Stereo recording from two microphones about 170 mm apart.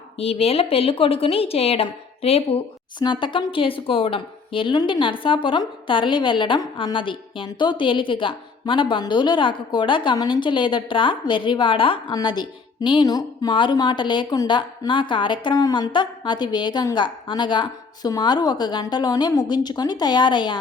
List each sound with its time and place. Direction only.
0.2 s a woman's voice: 35° left (ahead or behind)